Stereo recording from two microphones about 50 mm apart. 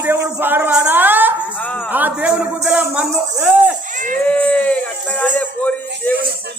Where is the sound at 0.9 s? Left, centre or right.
Right.